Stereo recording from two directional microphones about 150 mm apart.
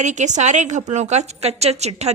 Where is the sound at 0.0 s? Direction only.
50° right (ahead or behind).